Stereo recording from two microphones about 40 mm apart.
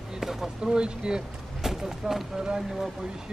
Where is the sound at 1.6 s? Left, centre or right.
Centre.